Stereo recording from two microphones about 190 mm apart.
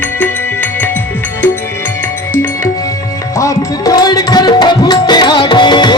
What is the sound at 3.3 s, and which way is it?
Music, 20° left (ahead or behind).